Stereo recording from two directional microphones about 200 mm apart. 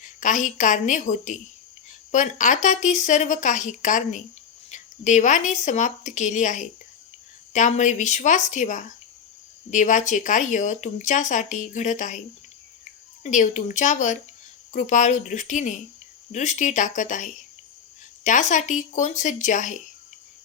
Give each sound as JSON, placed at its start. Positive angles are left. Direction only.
{"t": 0.0, "sound": "a woman's voice", "side_deg": 40}
{"t": 13.2, "sound": "speech", "side_deg": 40}